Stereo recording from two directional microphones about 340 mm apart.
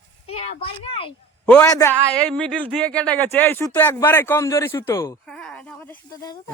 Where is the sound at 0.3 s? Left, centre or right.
Centre.